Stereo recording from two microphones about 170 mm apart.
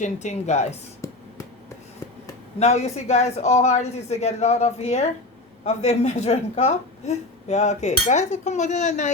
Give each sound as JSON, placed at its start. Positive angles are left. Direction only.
{"t": 0.0, "sound": "a woman's voice", "side_deg": 45}
{"t": 1.0, "sound": "a sound", "side_deg": 15}
{"t": 2.6, "sound": "a woman's voice", "side_deg": 40}